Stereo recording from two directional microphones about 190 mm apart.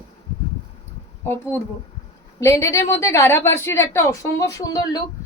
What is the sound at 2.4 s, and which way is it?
A woman's voice, 15° left (ahead or behind).